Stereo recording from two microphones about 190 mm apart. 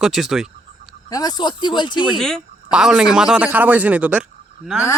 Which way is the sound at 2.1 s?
Centre (ahead or behind).